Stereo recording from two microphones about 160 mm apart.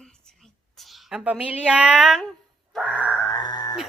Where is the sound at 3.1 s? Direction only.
20° left (ahead or behind).